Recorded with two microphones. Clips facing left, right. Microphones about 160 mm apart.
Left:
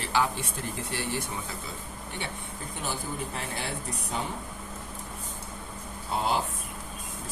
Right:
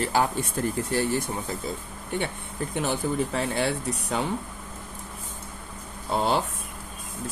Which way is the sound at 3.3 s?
90° right.